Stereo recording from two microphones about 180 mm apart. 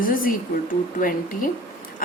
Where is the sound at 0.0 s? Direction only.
50° left (ahead or behind).